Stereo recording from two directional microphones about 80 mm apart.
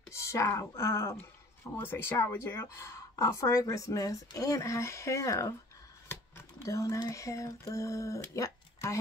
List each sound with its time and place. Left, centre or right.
0.1 s speech: left
6.6 s speech: left